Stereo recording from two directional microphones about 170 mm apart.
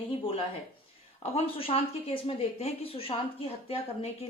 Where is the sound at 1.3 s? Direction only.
35° left (ahead or behind).